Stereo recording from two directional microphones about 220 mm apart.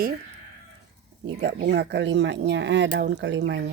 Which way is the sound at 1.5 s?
50° right (ahead or behind).